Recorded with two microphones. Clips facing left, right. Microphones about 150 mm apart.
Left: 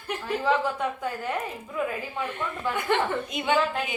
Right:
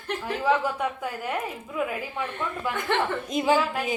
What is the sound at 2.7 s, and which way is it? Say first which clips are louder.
Speech: left 2 dB; 10° right (ahead or behind).